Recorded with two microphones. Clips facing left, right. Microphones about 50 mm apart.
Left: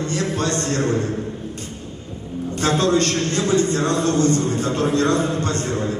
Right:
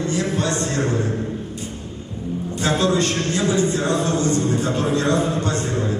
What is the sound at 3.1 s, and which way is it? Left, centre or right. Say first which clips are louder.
Speech: even; centre.